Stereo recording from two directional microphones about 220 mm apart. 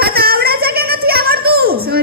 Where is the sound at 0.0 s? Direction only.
45° right (ahead or behind).